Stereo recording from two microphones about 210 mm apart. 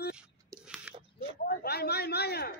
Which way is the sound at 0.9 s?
5° right (ahead or behind).